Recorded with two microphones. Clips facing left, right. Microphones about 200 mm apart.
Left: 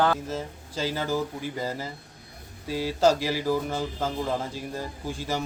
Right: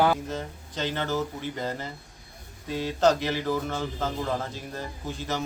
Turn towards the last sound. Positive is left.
turn(degrees=10)  # may be behind; listen again after turning